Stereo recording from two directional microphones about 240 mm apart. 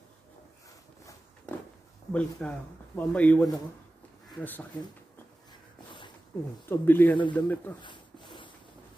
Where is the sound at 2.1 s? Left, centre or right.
Centre.